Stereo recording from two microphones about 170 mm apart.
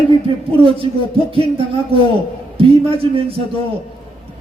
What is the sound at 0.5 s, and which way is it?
Speech, 35° right (ahead or behind).